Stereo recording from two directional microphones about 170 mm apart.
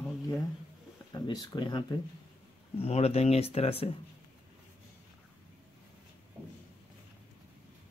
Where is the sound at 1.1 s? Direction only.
25° left (ahead or behind).